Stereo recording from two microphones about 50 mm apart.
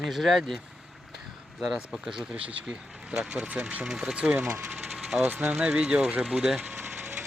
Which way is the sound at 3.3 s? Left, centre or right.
Right.